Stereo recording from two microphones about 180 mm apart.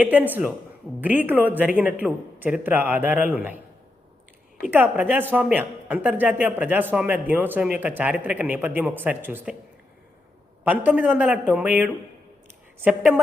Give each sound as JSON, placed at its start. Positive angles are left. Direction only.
{"t": 0.0, "sound": "speech", "side_deg": -10}
{"t": 4.6, "sound": "speech", "side_deg": -10}
{"t": 10.6, "sound": "speech", "side_deg": -10}